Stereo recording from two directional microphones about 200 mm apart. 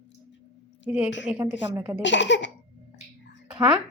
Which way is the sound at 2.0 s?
65° left (ahead or behind).